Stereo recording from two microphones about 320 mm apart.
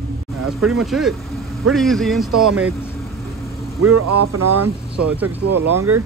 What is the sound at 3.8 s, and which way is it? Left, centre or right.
Speech, right.